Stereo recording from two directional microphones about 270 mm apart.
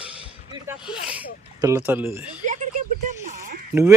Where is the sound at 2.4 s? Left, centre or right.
Right.